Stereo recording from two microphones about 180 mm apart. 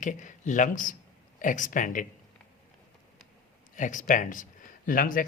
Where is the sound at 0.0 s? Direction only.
45° left (ahead or behind).